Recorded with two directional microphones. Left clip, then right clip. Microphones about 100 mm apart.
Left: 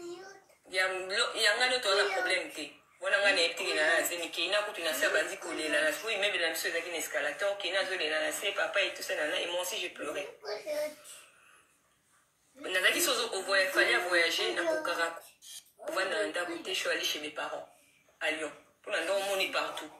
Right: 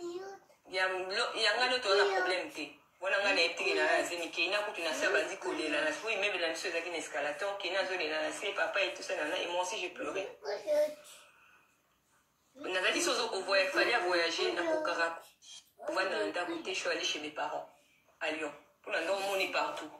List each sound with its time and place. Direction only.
0.7 s a man's voice: 15° left (ahead or behind)
12.6 s a man's voice: 15° left (ahead or behind)